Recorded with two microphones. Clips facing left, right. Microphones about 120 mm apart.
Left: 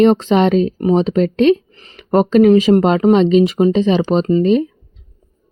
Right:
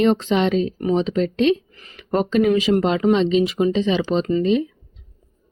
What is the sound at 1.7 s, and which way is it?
Speech, 30° left (ahead or behind).